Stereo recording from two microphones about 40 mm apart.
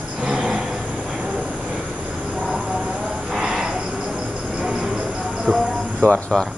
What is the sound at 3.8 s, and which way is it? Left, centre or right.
Cricket, centre.